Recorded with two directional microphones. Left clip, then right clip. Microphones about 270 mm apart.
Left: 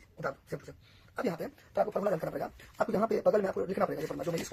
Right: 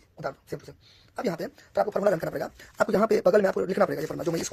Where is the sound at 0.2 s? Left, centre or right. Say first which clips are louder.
Right 3 dB; right.